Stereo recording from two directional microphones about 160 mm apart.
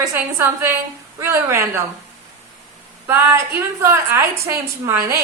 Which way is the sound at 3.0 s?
15° right (ahead or behind).